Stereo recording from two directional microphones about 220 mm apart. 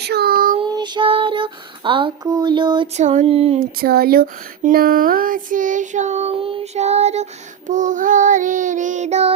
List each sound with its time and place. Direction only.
0.0 s child singing: 45° right (ahead or behind)
0.6 s child singing: 20° right (ahead or behind)
3.6 s speech: 45° right (ahead or behind)